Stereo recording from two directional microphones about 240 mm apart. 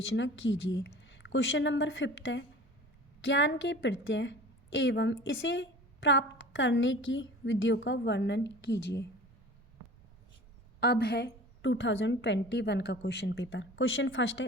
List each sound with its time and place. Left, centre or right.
0.0 s a woman's voice: left
10.8 s a woman's voice: left